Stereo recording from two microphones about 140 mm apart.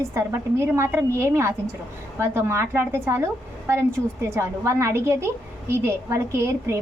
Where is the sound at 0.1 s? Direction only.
20° right (ahead or behind).